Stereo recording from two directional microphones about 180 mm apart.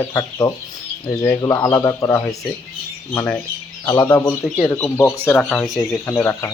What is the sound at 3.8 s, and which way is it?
Speech, 15° left (ahead or behind).